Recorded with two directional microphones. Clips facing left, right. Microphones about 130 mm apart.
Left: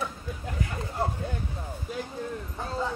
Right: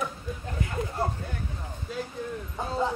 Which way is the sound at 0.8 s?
30° left (ahead or behind).